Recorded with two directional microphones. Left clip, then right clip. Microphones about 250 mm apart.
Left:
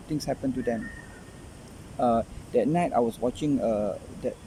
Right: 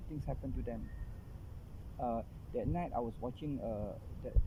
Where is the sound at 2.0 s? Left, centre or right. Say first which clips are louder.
Left 14 dB; centre.